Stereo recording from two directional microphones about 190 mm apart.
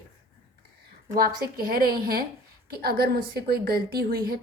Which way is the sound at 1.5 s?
50° right (ahead or behind).